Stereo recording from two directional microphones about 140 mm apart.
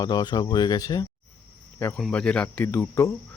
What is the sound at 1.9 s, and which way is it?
Speech, 5° left (ahead or behind).